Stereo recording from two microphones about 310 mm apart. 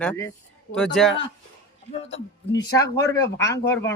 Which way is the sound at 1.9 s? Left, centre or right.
Centre.